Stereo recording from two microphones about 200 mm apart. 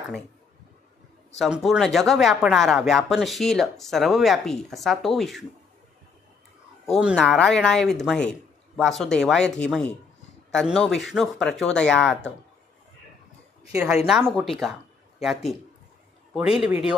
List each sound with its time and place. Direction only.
1.4 s speech: centre (ahead or behind)
7.0 s speech: centre (ahead or behind)
13.7 s speech: 5° right (ahead or behind)